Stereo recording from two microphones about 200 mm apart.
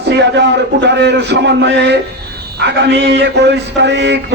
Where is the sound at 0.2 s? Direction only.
60° right (ahead or behind).